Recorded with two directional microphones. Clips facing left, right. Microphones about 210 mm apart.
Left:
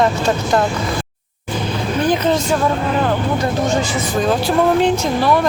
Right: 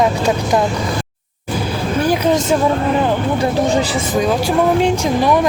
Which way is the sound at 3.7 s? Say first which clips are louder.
Right 2 dB; 35° right (ahead or behind).